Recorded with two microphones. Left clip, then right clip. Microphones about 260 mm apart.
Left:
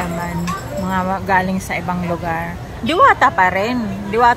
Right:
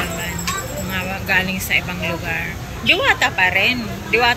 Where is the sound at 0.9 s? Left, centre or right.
Centre.